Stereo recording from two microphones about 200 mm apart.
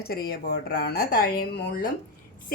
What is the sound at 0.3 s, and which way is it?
A woman's voice, 50° left (ahead or behind).